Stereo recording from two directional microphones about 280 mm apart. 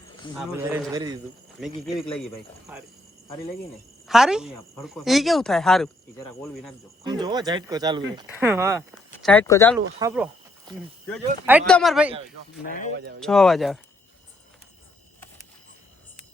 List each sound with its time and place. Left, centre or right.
0.3 s speech: centre
1.6 s speech: centre
4.0 s speech: centre
7.0 s speech: centre
9.1 s speech: centre
10.0 s speech: centre
12.6 s speech: left
13.1 s speech: centre